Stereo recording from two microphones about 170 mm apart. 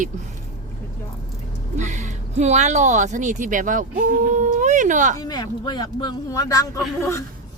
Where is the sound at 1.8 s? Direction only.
45° right (ahead or behind).